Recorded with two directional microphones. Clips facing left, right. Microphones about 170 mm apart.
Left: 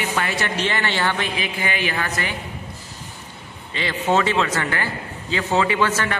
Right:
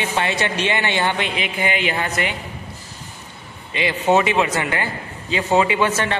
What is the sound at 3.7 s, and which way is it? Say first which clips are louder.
A man's voice: right 3 dB; 15° right (ahead or behind).